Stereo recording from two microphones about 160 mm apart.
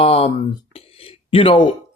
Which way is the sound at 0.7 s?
35° left (ahead or behind).